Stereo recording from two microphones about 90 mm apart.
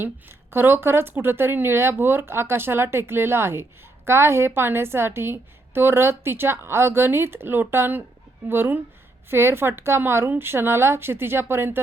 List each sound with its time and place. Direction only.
0.5 s speech: 25° right (ahead or behind)